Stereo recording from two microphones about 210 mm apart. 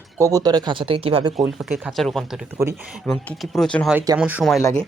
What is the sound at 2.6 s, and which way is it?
Speech, 10° right (ahead or behind).